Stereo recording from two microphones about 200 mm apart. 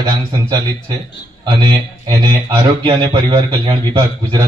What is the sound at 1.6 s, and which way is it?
A man's voice, 20° right (ahead or behind).